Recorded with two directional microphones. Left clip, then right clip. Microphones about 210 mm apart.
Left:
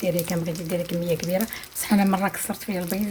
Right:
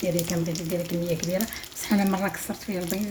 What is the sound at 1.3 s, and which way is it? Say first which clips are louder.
Speech: left 3 dB; 20° left (ahead or behind).